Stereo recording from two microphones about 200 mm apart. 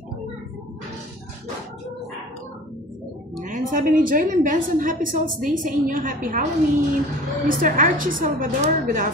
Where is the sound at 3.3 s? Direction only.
40° right (ahead or behind).